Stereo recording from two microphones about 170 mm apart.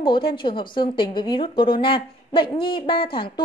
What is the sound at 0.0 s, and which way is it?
A woman's voice, 30° left (ahead or behind).